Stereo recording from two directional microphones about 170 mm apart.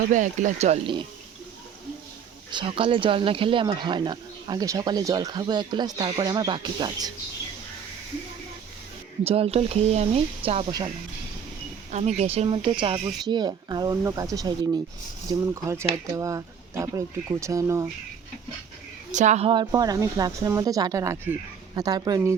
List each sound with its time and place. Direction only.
0.1 s speech: 45° right (ahead or behind)
2.5 s speech: 30° right (ahead or behind)
9.2 s speech: 35° right (ahead or behind)
11.9 s speech: 40° right (ahead or behind); by 17.8 s 20° right (ahead or behind)
19.1 s speech: 45° right (ahead or behind)
19.5 s speech: 25° right (ahead or behind)